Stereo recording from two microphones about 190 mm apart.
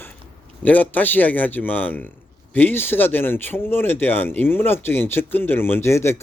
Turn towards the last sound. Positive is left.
turn(degrees=15)  # may be behind; listen again after turning